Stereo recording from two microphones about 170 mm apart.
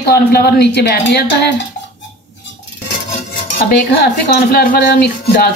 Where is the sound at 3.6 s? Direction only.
65° left (ahead or behind).